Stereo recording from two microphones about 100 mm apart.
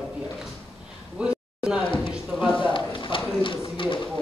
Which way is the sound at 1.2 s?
10° right (ahead or behind).